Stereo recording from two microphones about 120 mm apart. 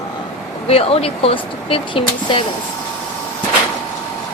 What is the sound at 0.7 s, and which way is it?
Speech, 55° left (ahead or behind).